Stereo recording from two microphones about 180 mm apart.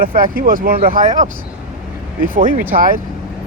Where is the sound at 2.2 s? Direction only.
50° right (ahead or behind).